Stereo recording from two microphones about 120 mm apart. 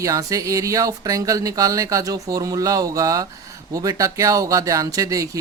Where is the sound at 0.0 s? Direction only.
30° right (ahead or behind).